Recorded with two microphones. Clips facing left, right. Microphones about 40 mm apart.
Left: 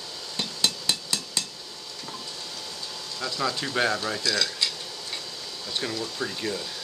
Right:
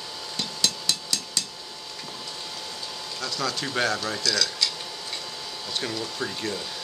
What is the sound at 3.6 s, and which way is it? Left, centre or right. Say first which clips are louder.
Speech: even; centre.